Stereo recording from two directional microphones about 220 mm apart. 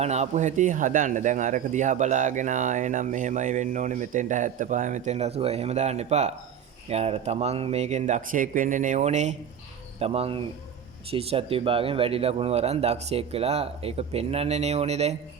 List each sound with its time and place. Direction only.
0.0 s speech: 30° right (ahead or behind)